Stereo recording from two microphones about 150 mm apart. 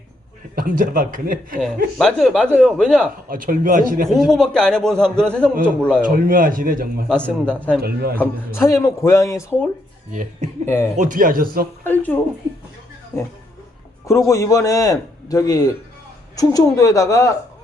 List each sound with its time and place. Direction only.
0.5 s speech: 70° right (ahead or behind)
2.0 s a man's voice: centre (ahead or behind)
3.2 s a man's voice: 65° right (ahead or behind)
4.1 s a man's voice: centre (ahead or behind)
6.0 s speech: 70° right (ahead or behind)
7.1 s speech: 5° left (ahead or behind)
7.8 s a man's voice: 90° right
8.2 s a man's voice: 15° left (ahead or behind)
10.1 s a man's voice: 55° right (ahead or behind); by 11.7 s 75° right (ahead or behind)
11.8 s a man's voice: 10° left (ahead or behind)